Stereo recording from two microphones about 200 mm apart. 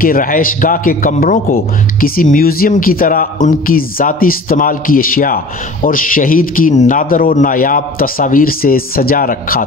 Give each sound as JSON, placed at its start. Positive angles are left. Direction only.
{"t": 0.0, "sound": "a man's voice", "side_deg": 45}